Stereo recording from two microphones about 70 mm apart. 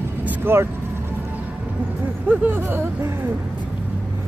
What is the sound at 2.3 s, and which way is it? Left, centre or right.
Speech, right.